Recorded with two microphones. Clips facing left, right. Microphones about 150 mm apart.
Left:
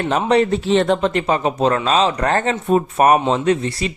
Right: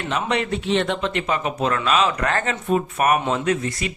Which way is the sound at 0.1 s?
35° left (ahead or behind).